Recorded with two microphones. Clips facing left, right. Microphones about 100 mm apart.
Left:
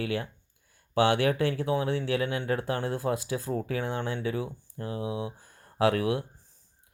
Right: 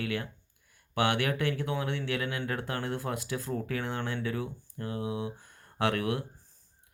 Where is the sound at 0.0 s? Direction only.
30° left (ahead or behind).